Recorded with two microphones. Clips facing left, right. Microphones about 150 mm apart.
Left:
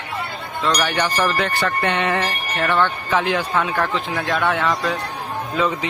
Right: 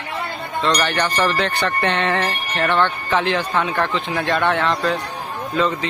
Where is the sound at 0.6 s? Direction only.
5° left (ahead or behind).